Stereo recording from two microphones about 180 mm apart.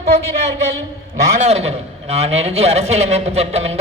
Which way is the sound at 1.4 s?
35° right (ahead or behind).